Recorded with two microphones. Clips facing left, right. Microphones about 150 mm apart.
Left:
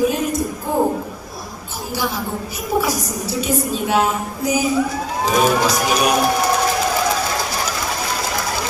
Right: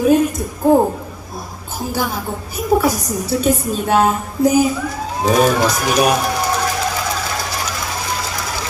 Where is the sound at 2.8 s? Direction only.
50° right (ahead or behind).